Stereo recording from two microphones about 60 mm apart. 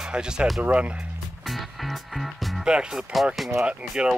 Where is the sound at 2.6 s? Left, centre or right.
Centre.